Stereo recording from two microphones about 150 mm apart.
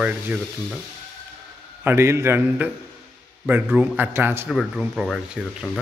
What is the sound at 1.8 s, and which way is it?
Speech, 15° right (ahead or behind).